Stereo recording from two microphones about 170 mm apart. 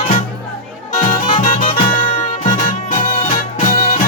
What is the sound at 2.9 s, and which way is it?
Music, 50° left (ahead or behind).